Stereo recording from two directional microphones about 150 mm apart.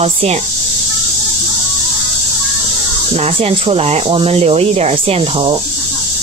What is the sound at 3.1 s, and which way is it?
Speech, 40° right (ahead or behind).